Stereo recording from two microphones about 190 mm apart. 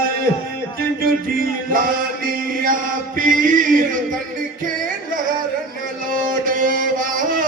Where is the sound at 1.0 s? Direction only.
50° right (ahead or behind).